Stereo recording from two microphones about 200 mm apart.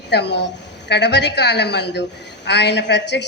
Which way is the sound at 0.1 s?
55° left (ahead or behind).